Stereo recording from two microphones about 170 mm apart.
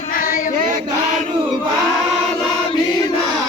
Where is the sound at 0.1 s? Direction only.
50° left (ahead or behind).